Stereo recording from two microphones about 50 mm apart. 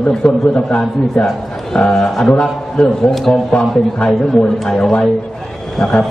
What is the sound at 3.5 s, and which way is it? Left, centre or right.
A man's voice, centre.